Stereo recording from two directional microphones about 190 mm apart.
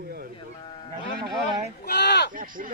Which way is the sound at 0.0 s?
55° right (ahead or behind).